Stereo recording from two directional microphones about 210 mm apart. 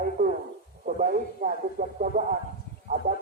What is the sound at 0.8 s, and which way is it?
Speech, 40° right (ahead or behind).